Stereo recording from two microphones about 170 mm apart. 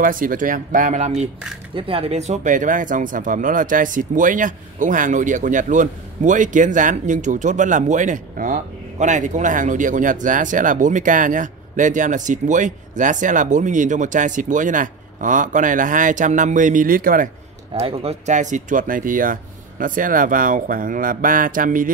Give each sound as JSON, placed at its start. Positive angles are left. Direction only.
{"t": 0.0, "sound": "speech", "side_deg": -55}
{"t": 17.7, "sound": "speech", "side_deg": -35}